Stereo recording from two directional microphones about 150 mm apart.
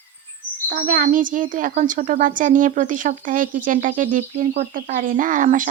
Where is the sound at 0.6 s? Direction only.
65° right (ahead or behind).